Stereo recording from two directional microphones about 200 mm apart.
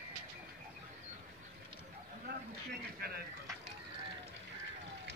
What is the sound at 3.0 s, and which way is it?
Speech, 50° right (ahead or behind).